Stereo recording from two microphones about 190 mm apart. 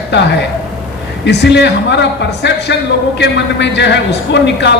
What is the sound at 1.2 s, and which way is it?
Speech, 65° left (ahead or behind).